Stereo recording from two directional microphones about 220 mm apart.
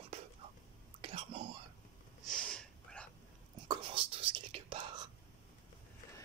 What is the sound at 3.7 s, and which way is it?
Whispering, 25° right (ahead or behind).